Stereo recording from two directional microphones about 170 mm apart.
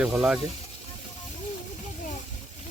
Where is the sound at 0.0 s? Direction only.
5° right (ahead or behind).